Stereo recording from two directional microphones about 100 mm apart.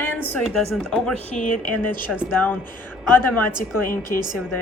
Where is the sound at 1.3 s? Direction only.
15° left (ahead or behind).